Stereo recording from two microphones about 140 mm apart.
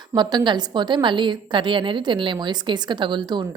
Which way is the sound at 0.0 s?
30° right (ahead or behind).